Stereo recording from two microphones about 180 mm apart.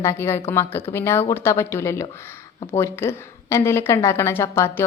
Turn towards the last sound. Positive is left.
turn(degrees=15)  # may be behind; listen again after turning